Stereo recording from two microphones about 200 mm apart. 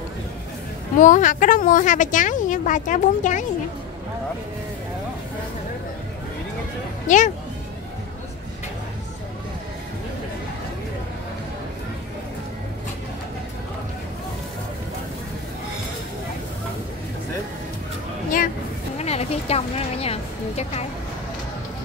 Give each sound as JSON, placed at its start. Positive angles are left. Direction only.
{"t": 0.9, "sound": "a woman's voice", "side_deg": 40}
{"t": 7.1, "sound": "a woman's voice", "side_deg": 40}
{"t": 18.9, "sound": "a sound", "side_deg": 30}